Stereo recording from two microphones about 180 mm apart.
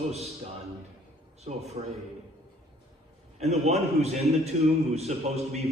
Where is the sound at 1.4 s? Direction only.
35° right (ahead or behind).